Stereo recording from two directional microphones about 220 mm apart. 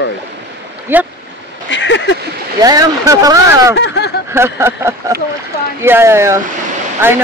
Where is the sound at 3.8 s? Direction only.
50° left (ahead or behind).